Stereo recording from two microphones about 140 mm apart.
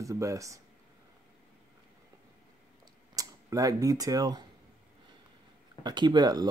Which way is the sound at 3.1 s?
25° right (ahead or behind).